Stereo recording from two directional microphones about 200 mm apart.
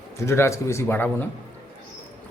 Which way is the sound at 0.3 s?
15° left (ahead or behind).